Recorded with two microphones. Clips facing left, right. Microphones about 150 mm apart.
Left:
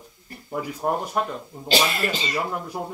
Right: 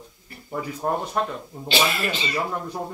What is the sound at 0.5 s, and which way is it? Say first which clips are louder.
Speech: even; 10° left (ahead or behind).